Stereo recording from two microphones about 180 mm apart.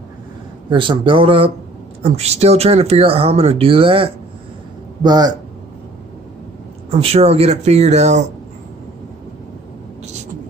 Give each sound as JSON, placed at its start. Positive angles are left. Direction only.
{"t": 0.7, "sound": "speech", "side_deg": -25}
{"t": 6.9, "sound": "speech", "side_deg": -35}